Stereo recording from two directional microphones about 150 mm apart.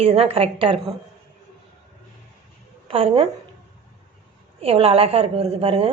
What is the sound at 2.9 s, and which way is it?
Speech, 40° right (ahead or behind).